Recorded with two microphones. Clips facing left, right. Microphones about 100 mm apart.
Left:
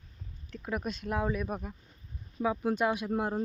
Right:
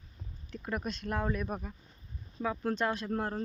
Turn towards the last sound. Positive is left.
turn(degrees=10)  # may be behind; listen again after turning